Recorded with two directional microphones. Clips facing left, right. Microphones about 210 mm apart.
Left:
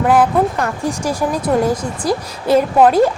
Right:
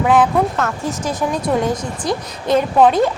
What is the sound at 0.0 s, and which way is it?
A woman's voice, 5° left (ahead or behind).